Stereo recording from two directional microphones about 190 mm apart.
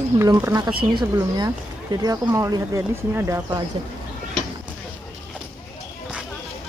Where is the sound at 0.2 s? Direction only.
15° right (ahead or behind).